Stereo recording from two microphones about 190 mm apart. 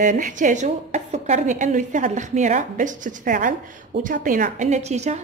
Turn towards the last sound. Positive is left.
turn(degrees=-35)  # may be behind; listen again after turning